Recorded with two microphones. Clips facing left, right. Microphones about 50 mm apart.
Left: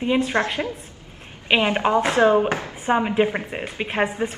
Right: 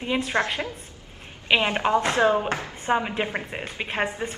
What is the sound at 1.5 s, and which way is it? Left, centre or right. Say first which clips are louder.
Speech: left 2 dB; centre.